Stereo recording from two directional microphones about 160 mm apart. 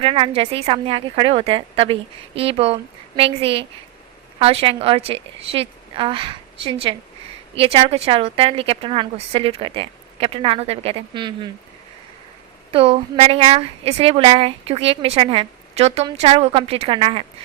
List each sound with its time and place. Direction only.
0.0 s a woman's voice: 35° right (ahead or behind)
12.7 s a woman's voice: 35° right (ahead or behind)